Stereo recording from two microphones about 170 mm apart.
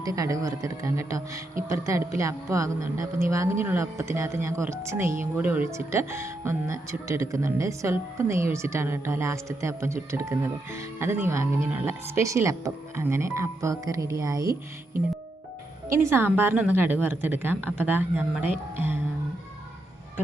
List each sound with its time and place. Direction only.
0.0 s speech: 20° right (ahead or behind)
15.9 s speech: 15° right (ahead or behind)